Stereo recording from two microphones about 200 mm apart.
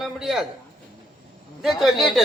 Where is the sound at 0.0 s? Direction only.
Centre (ahead or behind).